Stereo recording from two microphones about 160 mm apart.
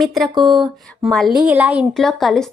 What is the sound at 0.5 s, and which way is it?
Speech, 30° right (ahead or behind).